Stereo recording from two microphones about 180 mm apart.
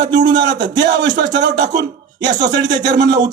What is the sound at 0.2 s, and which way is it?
Speech, 25° right (ahead or behind).